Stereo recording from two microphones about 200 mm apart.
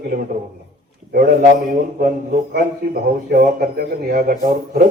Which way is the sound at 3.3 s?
45° right (ahead or behind).